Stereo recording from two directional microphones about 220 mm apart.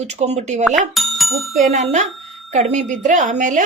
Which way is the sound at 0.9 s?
Centre (ahead or behind).